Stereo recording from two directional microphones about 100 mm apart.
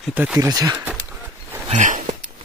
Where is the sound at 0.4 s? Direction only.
35° right (ahead or behind).